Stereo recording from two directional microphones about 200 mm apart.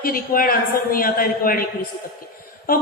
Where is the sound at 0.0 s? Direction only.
45° left (ahead or behind).